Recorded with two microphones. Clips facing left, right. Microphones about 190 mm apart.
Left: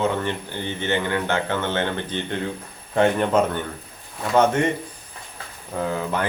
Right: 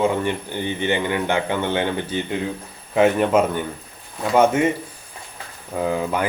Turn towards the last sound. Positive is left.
turn(degrees=-10)  # may be behind; listen again after turning